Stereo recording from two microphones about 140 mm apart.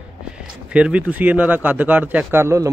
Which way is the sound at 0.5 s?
5° right (ahead or behind).